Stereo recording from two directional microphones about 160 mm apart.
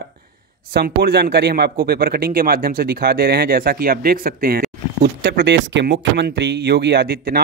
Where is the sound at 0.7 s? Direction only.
90° right.